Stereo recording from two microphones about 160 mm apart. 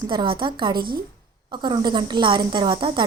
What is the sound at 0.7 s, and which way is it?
Speech, 70° right (ahead or behind).